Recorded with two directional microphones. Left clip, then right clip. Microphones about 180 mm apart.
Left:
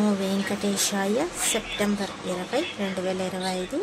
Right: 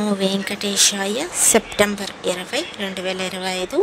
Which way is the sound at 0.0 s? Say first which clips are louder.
Right 5 dB; 55° right (ahead or behind).